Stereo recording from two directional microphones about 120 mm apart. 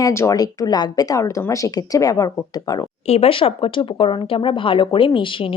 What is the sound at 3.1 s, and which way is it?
Speech, 55° left (ahead or behind).